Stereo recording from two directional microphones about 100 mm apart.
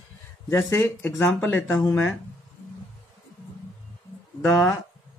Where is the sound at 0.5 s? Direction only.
20° left (ahead or behind).